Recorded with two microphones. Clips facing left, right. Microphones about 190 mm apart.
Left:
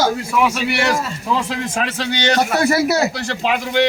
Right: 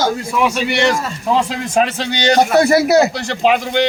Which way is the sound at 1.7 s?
25° right (ahead or behind).